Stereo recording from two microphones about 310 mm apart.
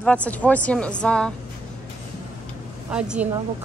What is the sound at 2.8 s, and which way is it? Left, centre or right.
Speech, centre.